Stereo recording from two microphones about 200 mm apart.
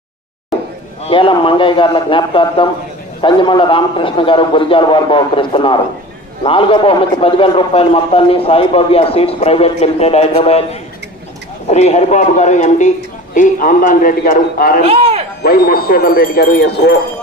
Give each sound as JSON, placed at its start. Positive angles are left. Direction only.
{"t": 1.0, "sound": "a man's voice", "side_deg": 25}
{"t": 14.8, "sound": "speech", "side_deg": -30}
{"t": 15.4, "sound": "speech", "side_deg": 50}